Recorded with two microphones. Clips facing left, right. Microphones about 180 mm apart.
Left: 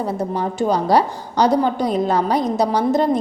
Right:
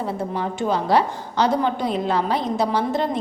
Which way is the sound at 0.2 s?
40° left (ahead or behind).